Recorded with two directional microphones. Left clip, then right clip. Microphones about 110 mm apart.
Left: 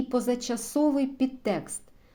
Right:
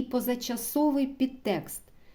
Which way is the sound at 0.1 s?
35° right (ahead or behind).